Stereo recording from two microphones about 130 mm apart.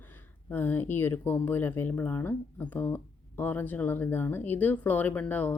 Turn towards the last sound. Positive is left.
turn(degrees=15)  # may be behind; listen again after turning